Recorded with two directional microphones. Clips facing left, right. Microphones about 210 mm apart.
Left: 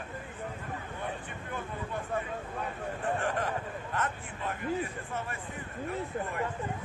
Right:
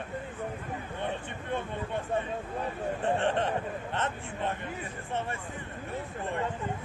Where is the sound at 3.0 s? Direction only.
25° right (ahead or behind).